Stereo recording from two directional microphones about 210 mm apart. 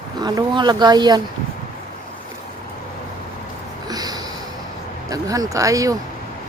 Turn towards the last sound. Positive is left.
turn(degrees=-15)  # may be behind; listen again after turning